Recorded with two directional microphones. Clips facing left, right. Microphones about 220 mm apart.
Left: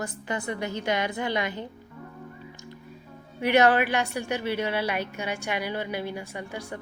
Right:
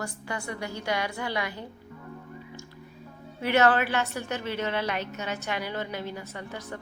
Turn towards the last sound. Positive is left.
turn(degrees=10)  # may be behind; listen again after turning